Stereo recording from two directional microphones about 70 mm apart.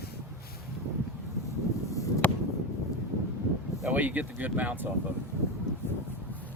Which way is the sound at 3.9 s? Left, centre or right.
Right.